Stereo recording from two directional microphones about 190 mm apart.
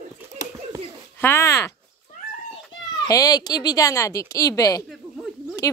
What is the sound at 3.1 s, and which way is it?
A child's voice, 20° left (ahead or behind).